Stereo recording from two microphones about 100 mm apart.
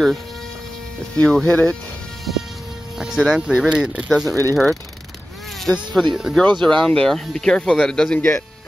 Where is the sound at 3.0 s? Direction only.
5° right (ahead or behind).